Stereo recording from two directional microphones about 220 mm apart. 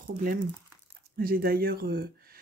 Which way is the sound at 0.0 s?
40° right (ahead or behind).